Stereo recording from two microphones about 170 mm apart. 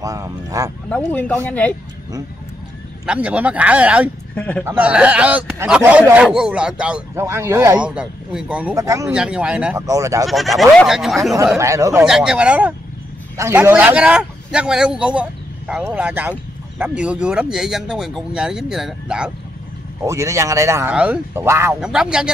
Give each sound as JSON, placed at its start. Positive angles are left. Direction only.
{"t": 0.0, "sound": "speech", "side_deg": -20}
{"t": 0.8, "sound": "speech", "side_deg": 5}
{"t": 3.1, "sound": "a man's voice", "side_deg": -5}
{"t": 4.4, "sound": "speech", "side_deg": 10}
{"t": 4.6, "sound": "a man's voice", "side_deg": -5}
{"t": 8.7, "sound": "speech", "side_deg": -20}
{"t": 9.1, "sound": "a man's voice", "side_deg": -5}
{"t": 9.8, "sound": "speech", "side_deg": -20}
{"t": 10.2, "sound": "a man's voice", "side_deg": 0}
{"t": 11.5, "sound": "a man's voice", "side_deg": -15}
{"t": 12.0, "sound": "a man's voice", "side_deg": -5}
{"t": 20.1, "sound": "a man's voice", "side_deg": -20}
{"t": 21.8, "sound": "a man's voice", "side_deg": -5}